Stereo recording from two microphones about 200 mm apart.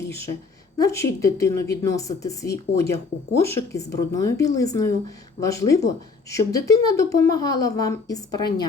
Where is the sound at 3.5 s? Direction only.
15° left (ahead or behind).